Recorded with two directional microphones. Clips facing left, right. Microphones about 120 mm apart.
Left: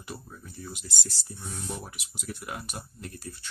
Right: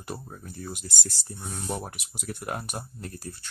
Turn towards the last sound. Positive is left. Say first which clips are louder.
# right 2 dB
turn(degrees=-45)  # may be behind; listen again after turning